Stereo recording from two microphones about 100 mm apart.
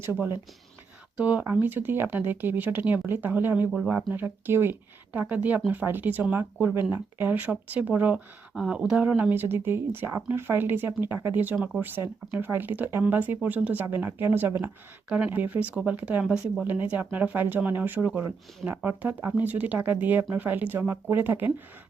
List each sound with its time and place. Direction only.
0.0 s speech: 25° right (ahead or behind)
1.1 s speech: 15° right (ahead or behind)